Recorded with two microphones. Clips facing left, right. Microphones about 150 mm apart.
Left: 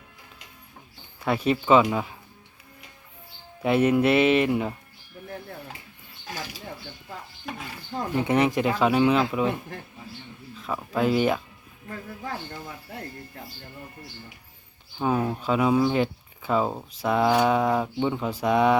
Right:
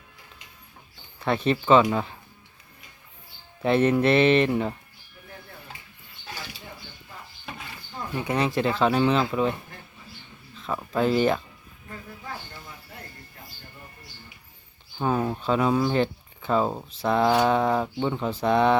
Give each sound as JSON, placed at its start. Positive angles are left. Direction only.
{"t": 1.2, "sound": "speech", "side_deg": 10}
{"t": 3.6, "sound": "speech", "side_deg": 10}
{"t": 8.1, "sound": "speech", "side_deg": 20}
{"t": 10.6, "sound": "speech", "side_deg": 5}
{"t": 11.9, "sound": "speech", "side_deg": 55}
{"t": 14.9, "sound": "speech", "side_deg": 5}